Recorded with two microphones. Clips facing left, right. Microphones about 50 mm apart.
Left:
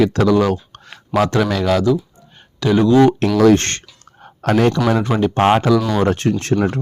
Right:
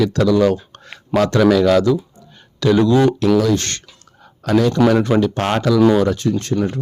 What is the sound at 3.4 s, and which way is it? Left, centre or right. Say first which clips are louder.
Speech: left 5 dB; left.